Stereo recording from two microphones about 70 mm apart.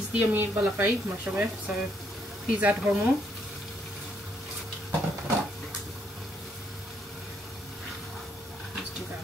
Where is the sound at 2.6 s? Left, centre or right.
Right.